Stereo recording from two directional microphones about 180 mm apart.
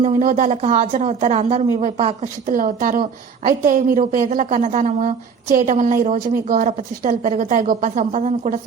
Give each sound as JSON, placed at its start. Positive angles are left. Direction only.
{"t": 0.2, "sound": "speech", "side_deg": -45}
{"t": 2.5, "sound": "a woman's voice", "side_deg": -50}